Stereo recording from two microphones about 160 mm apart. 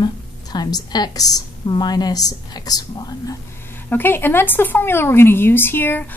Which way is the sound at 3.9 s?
15° left (ahead or behind).